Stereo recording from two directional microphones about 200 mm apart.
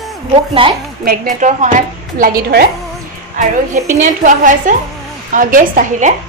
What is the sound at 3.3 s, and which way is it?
A woman's voice, 40° right (ahead or behind).